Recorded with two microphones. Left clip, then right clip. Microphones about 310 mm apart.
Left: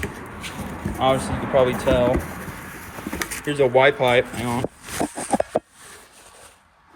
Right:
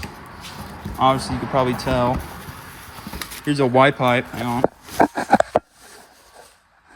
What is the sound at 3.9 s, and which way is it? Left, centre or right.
Speech, right.